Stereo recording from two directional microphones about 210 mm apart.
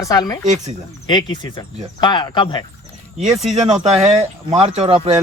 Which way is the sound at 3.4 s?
30° right (ahead or behind).